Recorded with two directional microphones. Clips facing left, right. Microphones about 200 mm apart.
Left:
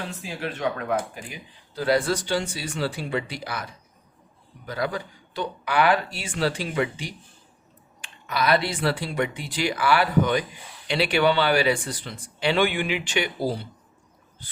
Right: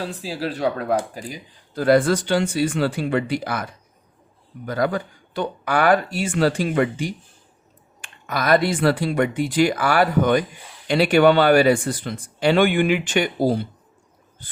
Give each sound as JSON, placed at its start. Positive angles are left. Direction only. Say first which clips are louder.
{"t": 0.0, "sound": "speech", "louder": "right 5 dB", "side_deg": -35}